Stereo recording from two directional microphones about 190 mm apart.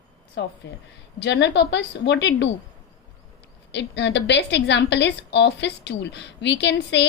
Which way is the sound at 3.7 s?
65° left (ahead or behind).